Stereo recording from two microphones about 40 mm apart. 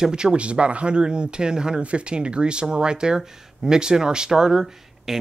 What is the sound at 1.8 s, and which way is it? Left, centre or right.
Speech, right.